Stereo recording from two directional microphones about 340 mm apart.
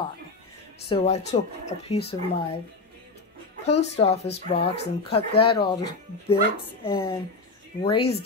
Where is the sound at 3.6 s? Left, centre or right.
Centre.